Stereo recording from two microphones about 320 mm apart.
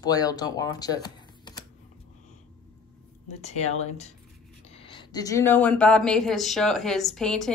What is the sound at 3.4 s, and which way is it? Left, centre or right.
Speech, centre.